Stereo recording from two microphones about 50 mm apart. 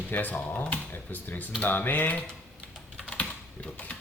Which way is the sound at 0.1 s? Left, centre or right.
Left.